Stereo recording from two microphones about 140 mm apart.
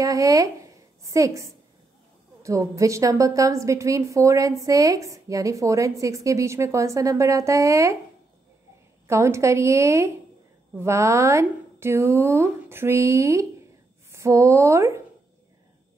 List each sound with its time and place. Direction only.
0.0 s a woman's voice: 25° right (ahead or behind)
9.0 s a woman's voice: 20° right (ahead or behind)